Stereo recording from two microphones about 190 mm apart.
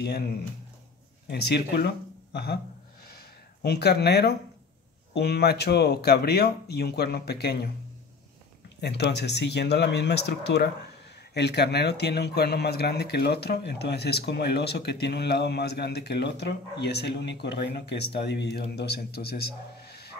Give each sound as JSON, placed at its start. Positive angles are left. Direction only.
{"t": 1.3, "sound": "speech", "side_deg": 60}
{"t": 3.1, "sound": "a sound", "side_deg": 55}
{"t": 5.1, "sound": "speech", "side_deg": 60}
{"t": 8.8, "sound": "speech", "side_deg": 60}